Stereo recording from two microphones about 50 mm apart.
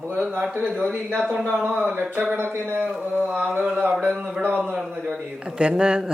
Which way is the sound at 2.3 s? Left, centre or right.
Right.